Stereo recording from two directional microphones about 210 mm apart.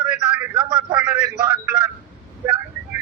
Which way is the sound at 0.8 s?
5° right (ahead or behind).